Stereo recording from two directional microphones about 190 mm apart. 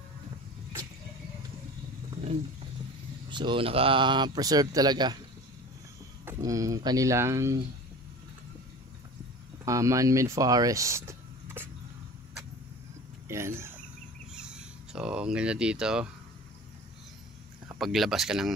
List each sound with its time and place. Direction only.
3.3 s speech: 25° right (ahead or behind)
6.2 s speech: 15° right (ahead or behind)
9.7 s speech: 15° right (ahead or behind)
13.3 s speech: 15° right (ahead or behind)
17.7 s speech: centre (ahead or behind)